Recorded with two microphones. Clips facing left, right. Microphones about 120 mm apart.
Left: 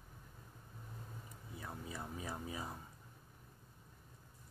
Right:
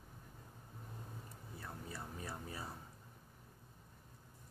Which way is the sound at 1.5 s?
15° left (ahead or behind).